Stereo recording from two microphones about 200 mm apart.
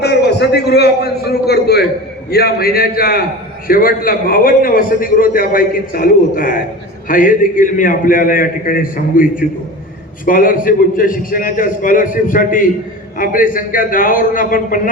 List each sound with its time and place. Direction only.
0.0 s a man's voice: 55° left (ahead or behind)